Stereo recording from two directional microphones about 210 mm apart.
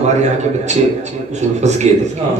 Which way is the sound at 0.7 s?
35° right (ahead or behind).